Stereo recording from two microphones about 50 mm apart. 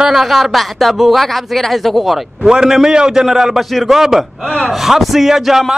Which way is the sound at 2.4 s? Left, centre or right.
Centre.